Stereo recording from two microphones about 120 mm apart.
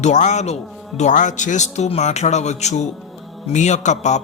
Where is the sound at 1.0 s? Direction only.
85° left.